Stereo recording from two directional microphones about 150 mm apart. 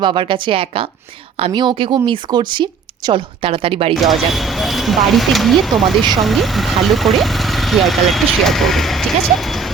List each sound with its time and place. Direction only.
0.0 s speech: 35° right (ahead or behind)
3.9 s speech: centre (ahead or behind)